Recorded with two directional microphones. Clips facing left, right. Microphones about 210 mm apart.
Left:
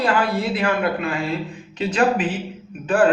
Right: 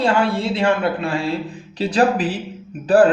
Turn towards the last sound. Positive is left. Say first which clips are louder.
# right 4 dB
turn(degrees=-35)  # may be behind; listen again after turning